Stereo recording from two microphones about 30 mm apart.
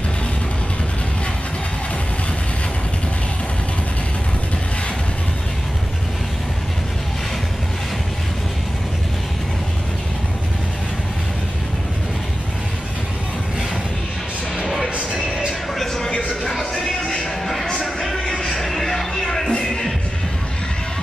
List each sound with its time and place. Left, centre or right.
15.1 s a sound: centre
16.4 s music: centre
18.2 s music: left
18.5 s music: centre